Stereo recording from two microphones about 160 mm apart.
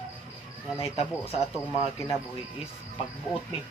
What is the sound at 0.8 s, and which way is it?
Speech, 40° left (ahead or behind).